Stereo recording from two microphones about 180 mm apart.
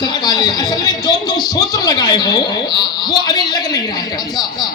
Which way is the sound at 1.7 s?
20° left (ahead or behind).